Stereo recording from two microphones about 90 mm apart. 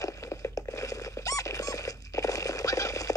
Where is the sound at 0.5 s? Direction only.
35° left (ahead or behind).